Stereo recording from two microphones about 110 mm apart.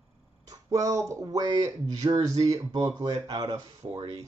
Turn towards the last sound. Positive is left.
turn(degrees=-50)  # may be behind; listen again after turning